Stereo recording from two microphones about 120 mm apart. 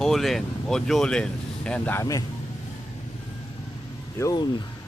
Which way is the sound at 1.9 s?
30° left (ahead or behind).